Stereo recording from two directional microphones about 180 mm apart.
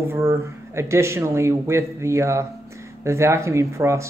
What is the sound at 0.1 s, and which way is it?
Speech, 15° right (ahead or behind).